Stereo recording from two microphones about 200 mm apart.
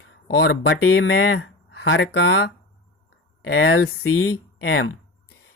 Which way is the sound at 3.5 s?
80° left.